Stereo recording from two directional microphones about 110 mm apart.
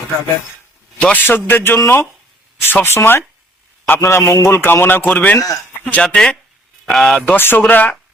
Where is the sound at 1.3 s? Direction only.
20° left (ahead or behind); by 7.3 s 5° left (ahead or behind).